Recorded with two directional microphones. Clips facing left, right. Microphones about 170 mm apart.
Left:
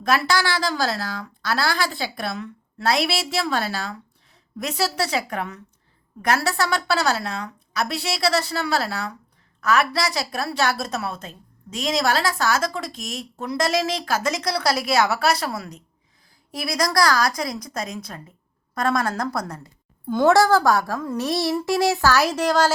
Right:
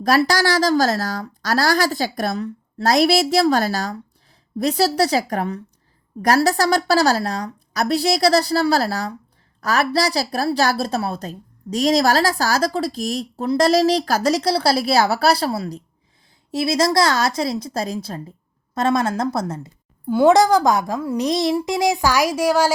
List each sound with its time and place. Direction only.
0.0 s a woman's voice: 40° right (ahead or behind); by 22.7 s 10° right (ahead or behind)